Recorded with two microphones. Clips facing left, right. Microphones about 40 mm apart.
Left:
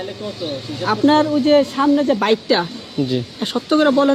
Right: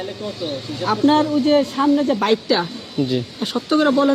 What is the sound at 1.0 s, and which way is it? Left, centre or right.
Speech, left.